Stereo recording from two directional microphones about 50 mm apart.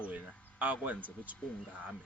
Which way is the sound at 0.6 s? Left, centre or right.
Right.